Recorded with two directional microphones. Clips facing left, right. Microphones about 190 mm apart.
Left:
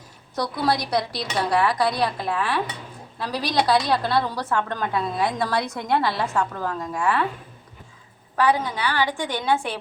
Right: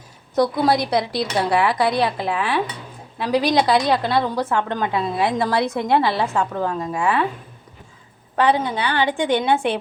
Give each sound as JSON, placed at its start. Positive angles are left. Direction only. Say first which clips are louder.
{"t": 0.6, "sound": "a woman's voice", "louder": "right 4 dB", "side_deg": -25}
{"t": 8.4, "sound": "a woman's voice", "louder": "right 3 dB", "side_deg": -25}